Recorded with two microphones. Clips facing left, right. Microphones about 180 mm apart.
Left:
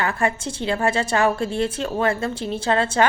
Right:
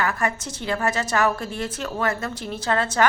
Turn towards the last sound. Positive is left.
turn(degrees=25)  # may be behind; listen again after turning